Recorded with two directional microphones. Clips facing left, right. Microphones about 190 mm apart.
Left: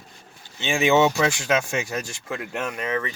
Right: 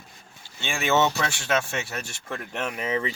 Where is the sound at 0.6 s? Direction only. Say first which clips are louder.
Left 4 dB; 15° left (ahead or behind).